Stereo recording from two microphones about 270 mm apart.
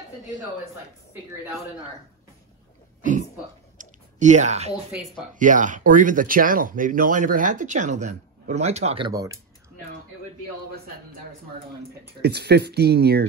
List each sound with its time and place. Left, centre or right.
3.0 s a sound: right
5.3 s speech: right; by 9.4 s centre
12.2 s speech: right